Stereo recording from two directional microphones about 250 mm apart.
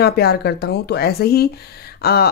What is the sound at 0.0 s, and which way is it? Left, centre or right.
Speech, left.